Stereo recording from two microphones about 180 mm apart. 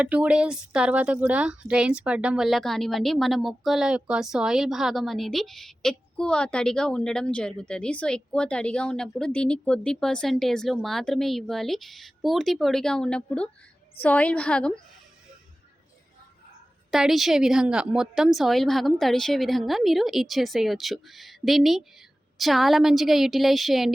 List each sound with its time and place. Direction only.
0.0 s a woman's voice: 5° right (ahead or behind)
16.9 s speech: centre (ahead or behind)